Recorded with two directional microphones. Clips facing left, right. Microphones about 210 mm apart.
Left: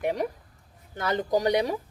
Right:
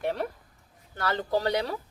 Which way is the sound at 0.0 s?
15° left (ahead or behind).